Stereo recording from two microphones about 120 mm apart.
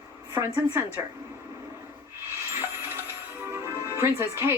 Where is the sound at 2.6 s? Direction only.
20° right (ahead or behind).